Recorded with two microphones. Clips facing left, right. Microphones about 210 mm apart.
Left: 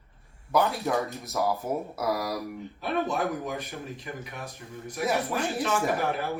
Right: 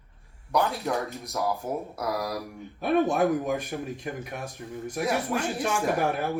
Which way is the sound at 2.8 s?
50° right (ahead or behind).